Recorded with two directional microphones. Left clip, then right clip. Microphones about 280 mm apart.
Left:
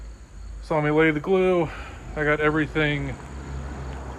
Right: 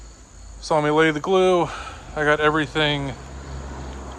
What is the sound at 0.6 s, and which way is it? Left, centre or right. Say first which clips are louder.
Speech: right 3 dB; centre.